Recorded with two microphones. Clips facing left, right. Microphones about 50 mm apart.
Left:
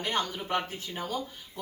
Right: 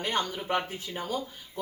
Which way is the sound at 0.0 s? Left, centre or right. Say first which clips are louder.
Right 1 dB; centre.